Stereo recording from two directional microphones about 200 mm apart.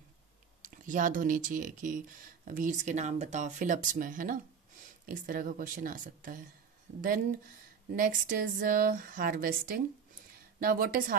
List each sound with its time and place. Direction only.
0.6 s speech: 40° right (ahead or behind)
7.9 s speech: 45° right (ahead or behind)